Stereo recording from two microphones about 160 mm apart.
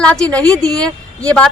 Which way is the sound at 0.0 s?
5° left (ahead or behind).